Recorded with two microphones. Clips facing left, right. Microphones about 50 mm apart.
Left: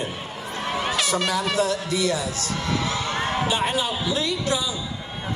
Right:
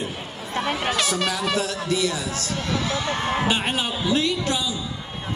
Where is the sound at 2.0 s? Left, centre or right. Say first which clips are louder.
Left 2 dB; left.